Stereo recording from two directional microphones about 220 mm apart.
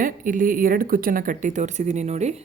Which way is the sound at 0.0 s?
40° right (ahead or behind).